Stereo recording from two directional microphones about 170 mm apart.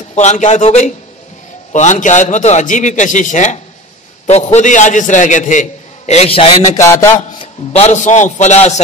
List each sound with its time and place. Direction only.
0.1 s a man's voice: 45° left (ahead or behind)
6.8 s a man's voice: 15° left (ahead or behind)
7.7 s a man's voice: 40° left (ahead or behind)